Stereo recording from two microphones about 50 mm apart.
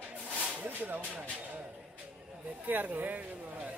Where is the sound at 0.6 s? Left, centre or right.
Right.